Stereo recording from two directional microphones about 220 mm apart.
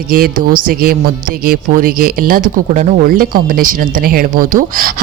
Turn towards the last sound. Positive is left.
turn(degrees=-40)  # may be behind; listen again after turning